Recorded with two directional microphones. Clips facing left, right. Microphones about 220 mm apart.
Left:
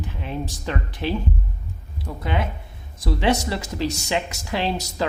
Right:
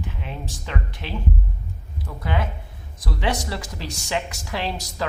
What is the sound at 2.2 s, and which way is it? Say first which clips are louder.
Speech: left 1 dB; 20° left (ahead or behind).